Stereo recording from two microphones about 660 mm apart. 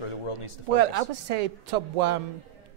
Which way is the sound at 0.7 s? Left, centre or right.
Right.